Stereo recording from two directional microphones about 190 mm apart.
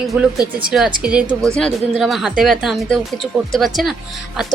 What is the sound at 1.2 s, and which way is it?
Speech, 15° right (ahead or behind).